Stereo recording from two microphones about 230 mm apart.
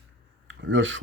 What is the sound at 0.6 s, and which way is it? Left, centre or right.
Speech, right.